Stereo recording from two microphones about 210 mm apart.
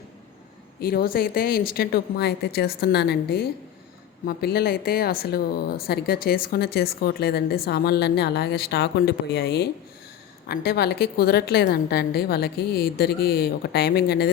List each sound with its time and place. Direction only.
0.8 s a woman's voice: 45° left (ahead or behind)